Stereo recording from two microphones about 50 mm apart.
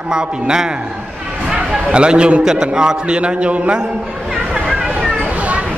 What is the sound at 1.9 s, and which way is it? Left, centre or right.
A man's voice, centre.